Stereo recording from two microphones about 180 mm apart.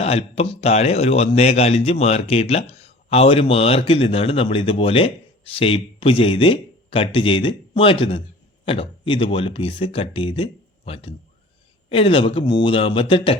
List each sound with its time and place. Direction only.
0.0 s speech: 35° left (ahead or behind)